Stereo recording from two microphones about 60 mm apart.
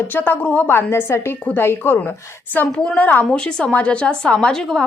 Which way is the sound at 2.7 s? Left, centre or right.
Centre.